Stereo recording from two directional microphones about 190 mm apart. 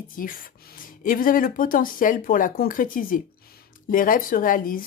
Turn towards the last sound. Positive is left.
turn(degrees=45)  # may be behind; listen again after turning